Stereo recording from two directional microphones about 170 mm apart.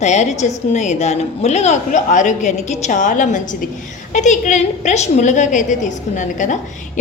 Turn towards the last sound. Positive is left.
turn(degrees=45)  # may be behind; listen again after turning